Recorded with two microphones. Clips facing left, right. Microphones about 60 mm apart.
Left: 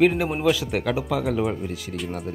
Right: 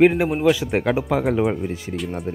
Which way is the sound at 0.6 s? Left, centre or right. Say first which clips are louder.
Right 4 dB; right.